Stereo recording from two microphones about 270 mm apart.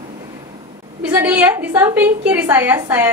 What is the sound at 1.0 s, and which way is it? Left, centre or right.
A woman's voice, centre.